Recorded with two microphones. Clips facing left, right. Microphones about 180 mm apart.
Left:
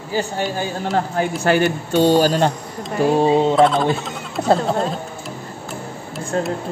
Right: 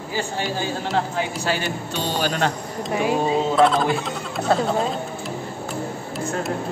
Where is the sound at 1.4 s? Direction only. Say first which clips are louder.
Left 8 dB; 55° left (ahead or behind).